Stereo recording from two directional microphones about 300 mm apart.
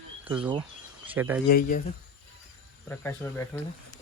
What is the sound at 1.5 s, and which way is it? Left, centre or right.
Speech, left.